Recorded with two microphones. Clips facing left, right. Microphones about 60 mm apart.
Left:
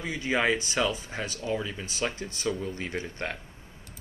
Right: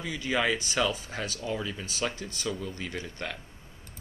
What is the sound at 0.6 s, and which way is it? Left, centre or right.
Speech, centre.